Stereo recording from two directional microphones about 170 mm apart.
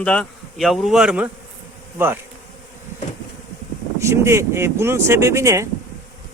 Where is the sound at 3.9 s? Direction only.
15° right (ahead or behind).